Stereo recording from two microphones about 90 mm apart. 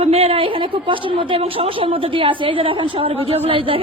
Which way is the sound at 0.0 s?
90° right.